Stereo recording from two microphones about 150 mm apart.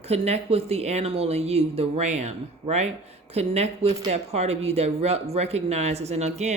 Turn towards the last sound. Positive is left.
turn(degrees=-50)  # may be behind; listen again after turning